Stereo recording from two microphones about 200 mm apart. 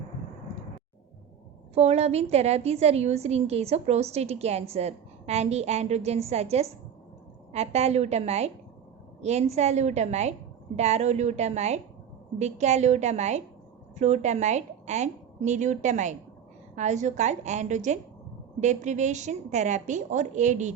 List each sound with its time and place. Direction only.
1.7 s a woman's voice: 30° right (ahead or behind)